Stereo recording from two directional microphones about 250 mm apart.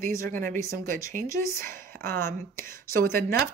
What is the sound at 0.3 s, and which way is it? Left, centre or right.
Speech, right.